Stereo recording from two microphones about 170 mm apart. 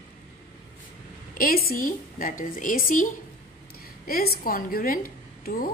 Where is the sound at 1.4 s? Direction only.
60° left (ahead or behind).